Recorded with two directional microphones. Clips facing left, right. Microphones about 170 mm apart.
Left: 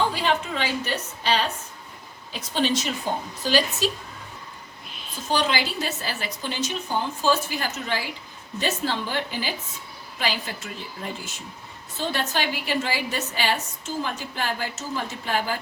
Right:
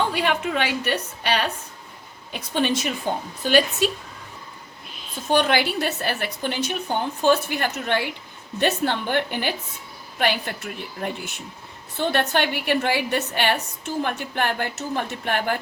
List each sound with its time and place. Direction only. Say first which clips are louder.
0.1 s a woman's voice: right 2 dB; 60° right (ahead or behind)
5.3 s a woman's voice: right 4 dB; 60° right (ahead or behind)